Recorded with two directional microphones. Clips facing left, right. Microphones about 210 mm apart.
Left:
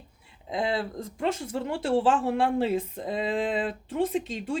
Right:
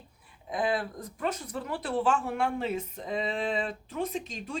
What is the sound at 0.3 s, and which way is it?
A woman's voice, 25° left (ahead or behind).